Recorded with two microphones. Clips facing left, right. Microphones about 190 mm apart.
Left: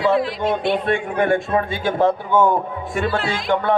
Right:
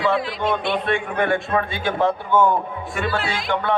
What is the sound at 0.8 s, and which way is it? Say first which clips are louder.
Music: left 2 dB; 40° left (ahead or behind).